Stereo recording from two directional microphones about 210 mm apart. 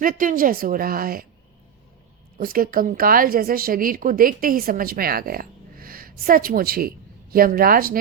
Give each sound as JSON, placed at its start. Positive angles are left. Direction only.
{"t": 0.0, "sound": "a woman's voice", "side_deg": -40}
{"t": 2.4, "sound": "a woman's voice", "side_deg": -45}